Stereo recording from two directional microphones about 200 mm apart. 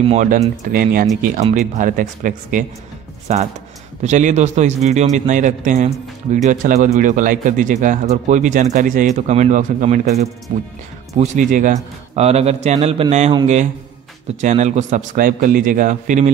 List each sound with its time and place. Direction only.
0.1 s a man's voice: 35° right (ahead or behind)
14.4 s a man's voice: 35° right (ahead or behind)